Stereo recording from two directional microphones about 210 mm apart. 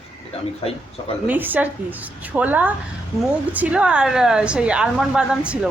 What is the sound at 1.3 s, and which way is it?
A woman's voice, 10° right (ahead or behind).